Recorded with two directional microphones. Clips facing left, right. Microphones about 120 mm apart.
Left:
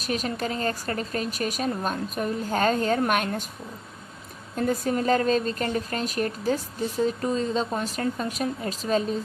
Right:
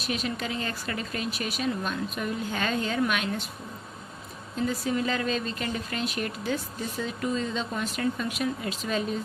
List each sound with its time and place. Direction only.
0.0 s speech: 40° left (ahead or behind)
4.5 s speech: 55° left (ahead or behind); by 9.1 s 35° left (ahead or behind)